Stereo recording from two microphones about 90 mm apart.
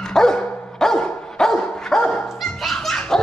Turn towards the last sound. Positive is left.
turn(degrees=5)  # may be behind; listen again after turning